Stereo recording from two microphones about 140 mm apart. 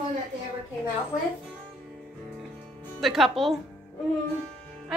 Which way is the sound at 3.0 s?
Centre (ahead or behind).